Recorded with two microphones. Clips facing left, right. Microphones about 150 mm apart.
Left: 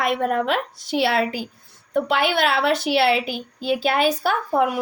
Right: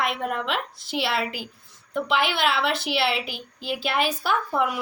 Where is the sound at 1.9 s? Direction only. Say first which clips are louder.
Left 4 dB; 45° left (ahead or behind).